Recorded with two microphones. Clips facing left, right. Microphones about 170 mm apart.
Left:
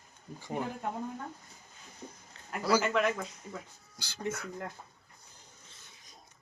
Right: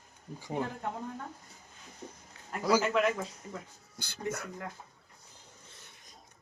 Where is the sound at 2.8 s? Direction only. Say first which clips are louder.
Right 1 dB; centre (ahead or behind).